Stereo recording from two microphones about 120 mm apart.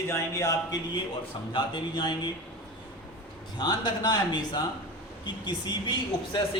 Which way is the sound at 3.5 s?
35° left (ahead or behind).